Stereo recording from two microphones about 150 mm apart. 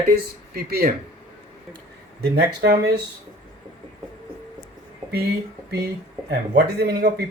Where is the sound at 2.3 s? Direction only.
90° right.